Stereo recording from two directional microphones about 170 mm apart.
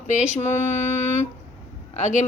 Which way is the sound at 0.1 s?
45° left (ahead or behind).